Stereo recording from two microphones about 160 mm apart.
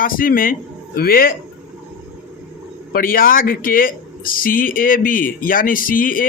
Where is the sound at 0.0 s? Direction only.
60° left (ahead or behind).